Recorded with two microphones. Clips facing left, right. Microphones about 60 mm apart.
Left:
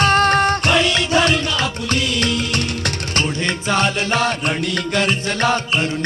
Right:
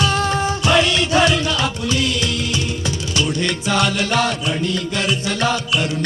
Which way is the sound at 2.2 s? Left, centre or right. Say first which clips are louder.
Left 2 dB; left.